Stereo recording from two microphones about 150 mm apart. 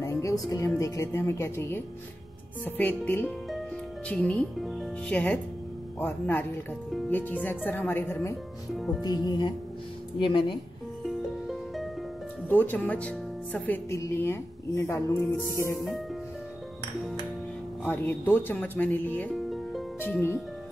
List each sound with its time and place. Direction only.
0.0 s speech: 20° left (ahead or behind)
8.7 s music: centre (ahead or behind)
9.0 s speech: 25° left (ahead or behind)
11.1 s music: centre (ahead or behind)
12.4 s speech: 10° left (ahead or behind)
15.7 s music: centre (ahead or behind)
17.8 s speech: 15° left (ahead or behind)
19.3 s music: centre (ahead or behind)
20.0 s speech: 15° left (ahead or behind)